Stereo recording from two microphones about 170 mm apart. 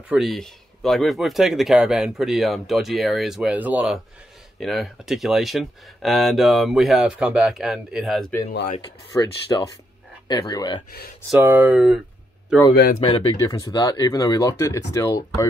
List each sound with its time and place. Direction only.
0.1 s speech: centre (ahead or behind)
8.8 s speech: 20° left (ahead or behind)
11.2 s speech: 10° right (ahead or behind)
12.7 s speech: 60° left (ahead or behind)
13.4 s speech: 20° left (ahead or behind)